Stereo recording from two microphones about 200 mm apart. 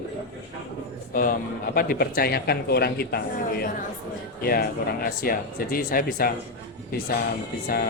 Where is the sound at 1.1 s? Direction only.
45° left (ahead or behind).